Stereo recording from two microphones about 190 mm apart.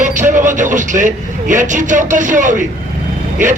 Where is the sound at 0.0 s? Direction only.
40° right (ahead or behind).